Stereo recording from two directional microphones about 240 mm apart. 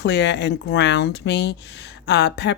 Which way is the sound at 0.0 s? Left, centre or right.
Left.